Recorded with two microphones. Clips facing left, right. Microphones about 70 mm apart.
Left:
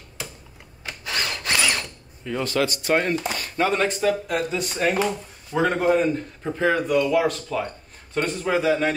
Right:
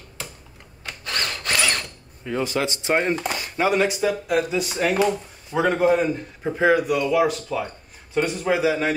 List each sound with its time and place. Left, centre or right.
0.8 s drill: centre
2.2 s speech: centre
2.6 s a man's voice: right; by 6.0 s centre
6.4 s speech: centre